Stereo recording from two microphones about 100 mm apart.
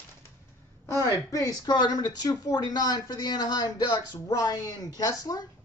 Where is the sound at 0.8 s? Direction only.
30° left (ahead or behind).